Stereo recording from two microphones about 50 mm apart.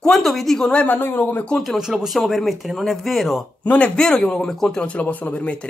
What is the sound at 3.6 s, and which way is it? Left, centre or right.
Speech, left.